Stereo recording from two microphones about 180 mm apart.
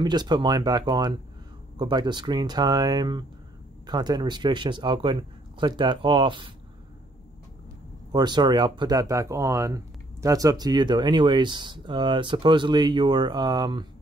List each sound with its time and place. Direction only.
0.0 s speech: 25° right (ahead or behind)
8.1 s speech: 25° right (ahead or behind)